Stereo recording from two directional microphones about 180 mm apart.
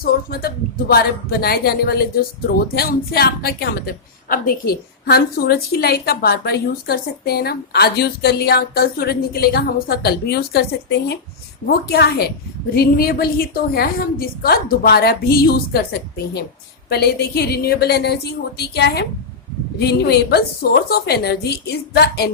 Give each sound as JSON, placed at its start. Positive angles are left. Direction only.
{"t": 0.0, "sound": "a woman's voice", "side_deg": 60}